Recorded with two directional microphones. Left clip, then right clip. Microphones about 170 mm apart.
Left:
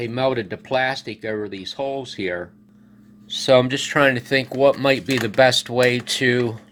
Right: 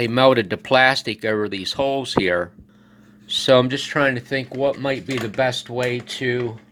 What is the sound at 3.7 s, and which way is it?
Speech, centre (ahead or behind).